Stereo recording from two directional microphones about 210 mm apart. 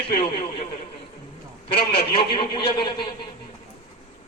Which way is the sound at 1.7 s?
25° left (ahead or behind).